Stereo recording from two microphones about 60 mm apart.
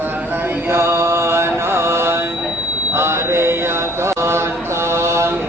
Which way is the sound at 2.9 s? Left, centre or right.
Right.